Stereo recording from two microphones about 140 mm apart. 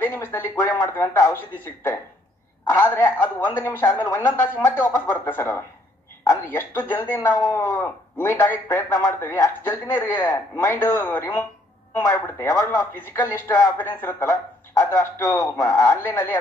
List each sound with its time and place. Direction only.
0.0 s speech: 15° left (ahead or behind)